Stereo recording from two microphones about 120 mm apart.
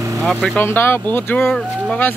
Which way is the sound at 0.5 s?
20° left (ahead or behind).